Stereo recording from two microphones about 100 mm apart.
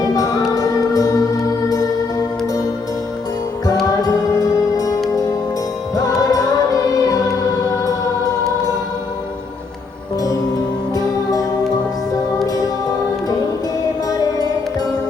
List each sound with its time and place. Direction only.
0.0 s music: 35° left (ahead or behind)
3.8 s music: 35° left (ahead or behind)
10.9 s music: 35° left (ahead or behind)
14.1 s music: 40° left (ahead or behind)